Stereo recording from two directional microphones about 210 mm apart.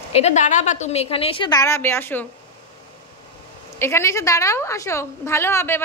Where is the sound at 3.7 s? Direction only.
10° left (ahead or behind).